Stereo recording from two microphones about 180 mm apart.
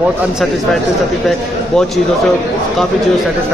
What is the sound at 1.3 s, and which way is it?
Speech, centre (ahead or behind).